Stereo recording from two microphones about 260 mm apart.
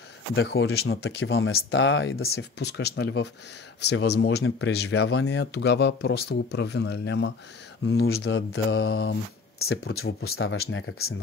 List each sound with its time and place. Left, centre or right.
0.4 s speech: left
9.7 s speech: left